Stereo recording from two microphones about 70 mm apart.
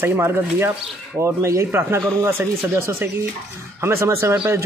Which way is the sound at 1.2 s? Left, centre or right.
Right.